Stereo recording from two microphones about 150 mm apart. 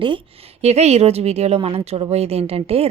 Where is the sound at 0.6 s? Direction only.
45° right (ahead or behind).